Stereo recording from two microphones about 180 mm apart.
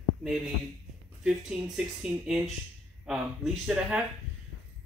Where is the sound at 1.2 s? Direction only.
5° right (ahead or behind).